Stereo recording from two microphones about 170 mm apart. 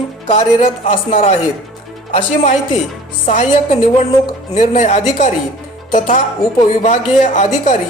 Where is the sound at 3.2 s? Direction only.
45° left (ahead or behind).